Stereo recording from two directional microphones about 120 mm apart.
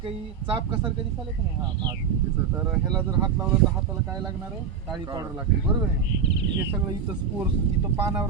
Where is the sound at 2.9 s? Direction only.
35° right (ahead or behind).